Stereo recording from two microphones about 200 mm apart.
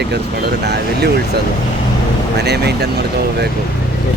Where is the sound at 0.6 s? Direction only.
55° right (ahead or behind).